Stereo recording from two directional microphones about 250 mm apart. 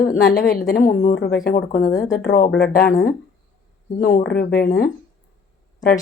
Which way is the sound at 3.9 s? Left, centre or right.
Left.